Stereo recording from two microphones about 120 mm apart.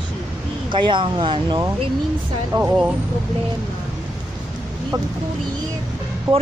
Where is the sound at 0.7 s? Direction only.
45° right (ahead or behind).